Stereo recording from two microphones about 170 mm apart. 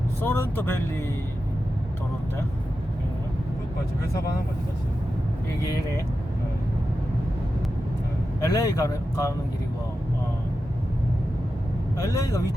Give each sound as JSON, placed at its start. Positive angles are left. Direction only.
{"t": 0.2, "sound": "speech", "side_deg": 10}
{"t": 8.4, "sound": "speech", "side_deg": 20}
{"t": 11.9, "sound": "speech", "side_deg": 20}